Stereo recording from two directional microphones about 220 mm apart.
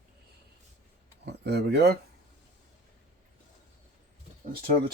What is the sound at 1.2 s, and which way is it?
Speech, 50° right (ahead or behind).